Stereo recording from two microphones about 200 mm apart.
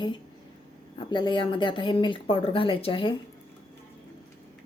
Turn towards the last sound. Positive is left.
turn(degrees=25)  # may be behind; listen again after turning